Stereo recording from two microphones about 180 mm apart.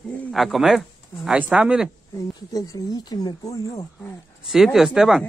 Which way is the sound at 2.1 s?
20° left (ahead or behind).